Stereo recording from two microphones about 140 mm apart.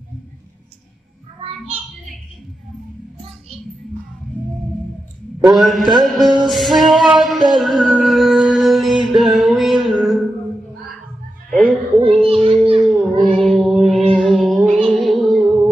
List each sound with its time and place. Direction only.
5.5 s a man's voice: centre (ahead or behind)
6.5 s music: centre (ahead or behind)
12.0 s children playing: 40° right (ahead or behind)
12.8 s music: 5° right (ahead or behind)
13.3 s child singing: centre (ahead or behind)
14.1 s music: centre (ahead or behind)